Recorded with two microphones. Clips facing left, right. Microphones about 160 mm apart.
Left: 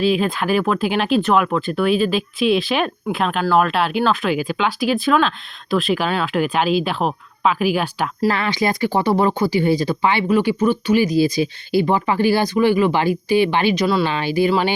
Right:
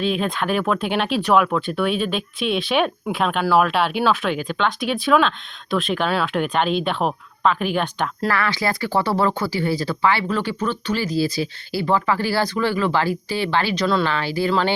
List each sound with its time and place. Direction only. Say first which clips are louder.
0.0 s speech: left 4 dB; 5° left (ahead or behind)
8.3 s speech: left 2 dB; 20° left (ahead or behind)
13.8 s speech: left 2 dB; 5° left (ahead or behind)
14.1 s speech: left 4 dB; 15° left (ahead or behind)